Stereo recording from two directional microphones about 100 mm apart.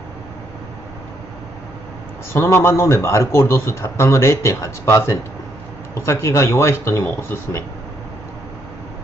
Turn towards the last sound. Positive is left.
turn(degrees=25)  # may be behind; listen again after turning